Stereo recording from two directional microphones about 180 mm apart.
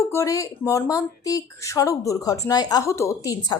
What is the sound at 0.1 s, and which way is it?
Speech, 15° left (ahead or behind).